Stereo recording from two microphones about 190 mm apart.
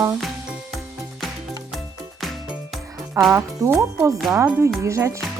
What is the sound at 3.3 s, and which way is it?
Speech, 15° right (ahead or behind).